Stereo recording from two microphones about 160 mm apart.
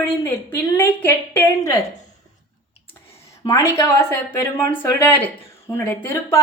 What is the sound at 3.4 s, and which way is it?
A woman's voice, 20° left (ahead or behind).